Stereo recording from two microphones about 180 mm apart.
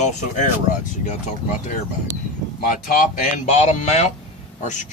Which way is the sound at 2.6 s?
50° left (ahead or behind).